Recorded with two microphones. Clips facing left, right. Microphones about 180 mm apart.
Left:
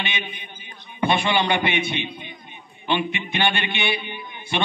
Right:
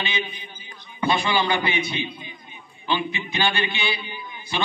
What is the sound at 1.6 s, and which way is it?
A man's voice, 25° left (ahead or behind).